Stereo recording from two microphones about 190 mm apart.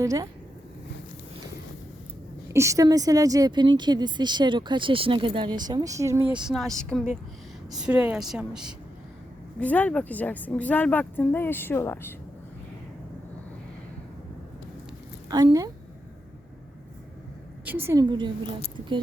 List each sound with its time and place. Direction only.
0.0 s speech: 15° right (ahead or behind)
2.5 s a woman's voice: 15° right (ahead or behind)
9.6 s speech: 10° left (ahead or behind)
15.3 s a woman's voice: 20° right (ahead or behind)
17.7 s a woman's voice: 10° right (ahead or behind)